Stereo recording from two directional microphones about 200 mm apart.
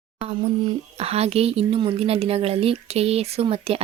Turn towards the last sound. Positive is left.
turn(degrees=-30)  # may be behind; listen again after turning